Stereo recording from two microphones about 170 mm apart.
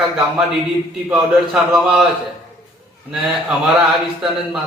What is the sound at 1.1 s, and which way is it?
Speech, 5° right (ahead or behind).